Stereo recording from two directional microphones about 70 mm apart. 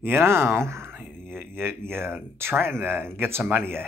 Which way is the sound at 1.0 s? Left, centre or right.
Centre.